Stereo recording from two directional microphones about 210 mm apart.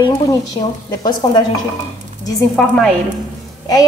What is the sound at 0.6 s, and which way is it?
A woman's voice, 20° left (ahead or behind).